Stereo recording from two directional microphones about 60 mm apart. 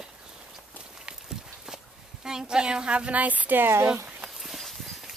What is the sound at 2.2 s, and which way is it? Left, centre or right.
A woman's voice, centre.